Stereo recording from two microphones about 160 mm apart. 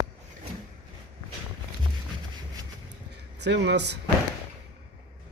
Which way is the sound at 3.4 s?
90° right.